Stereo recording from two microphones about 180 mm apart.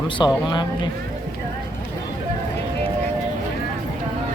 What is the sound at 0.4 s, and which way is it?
Speech, 25° left (ahead or behind).